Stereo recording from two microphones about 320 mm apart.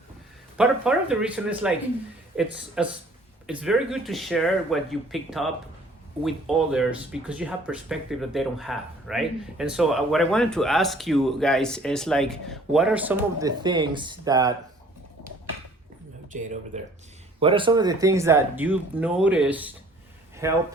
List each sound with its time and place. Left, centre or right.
0.5 s speech: centre
16.3 s a man's voice: right